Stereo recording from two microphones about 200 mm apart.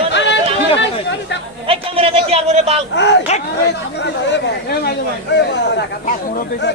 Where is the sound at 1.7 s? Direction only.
30° right (ahead or behind).